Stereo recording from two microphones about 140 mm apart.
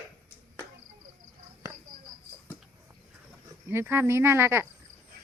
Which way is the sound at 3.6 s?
15° right (ahead or behind).